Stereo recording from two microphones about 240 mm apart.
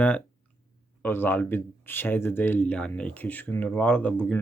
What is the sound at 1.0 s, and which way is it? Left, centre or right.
Speech, centre.